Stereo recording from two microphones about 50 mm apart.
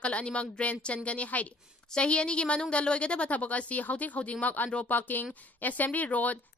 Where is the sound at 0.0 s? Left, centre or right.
Left.